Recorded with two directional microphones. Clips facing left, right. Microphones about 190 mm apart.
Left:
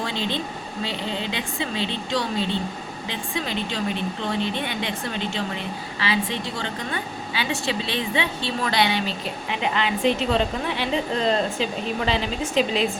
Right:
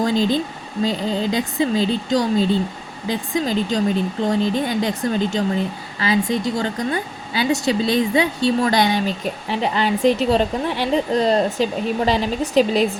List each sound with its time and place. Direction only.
0.0 s speech: 40° right (ahead or behind)